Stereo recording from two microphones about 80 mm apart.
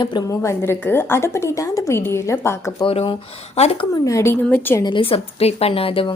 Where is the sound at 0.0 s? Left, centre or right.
Left.